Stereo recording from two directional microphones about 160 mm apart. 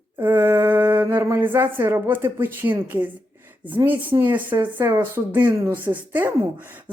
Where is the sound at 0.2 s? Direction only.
15° right (ahead or behind).